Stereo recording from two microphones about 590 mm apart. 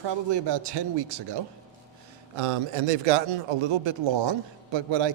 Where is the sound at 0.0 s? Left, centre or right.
Right.